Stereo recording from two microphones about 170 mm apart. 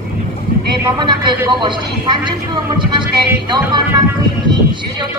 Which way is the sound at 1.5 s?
25° right (ahead or behind).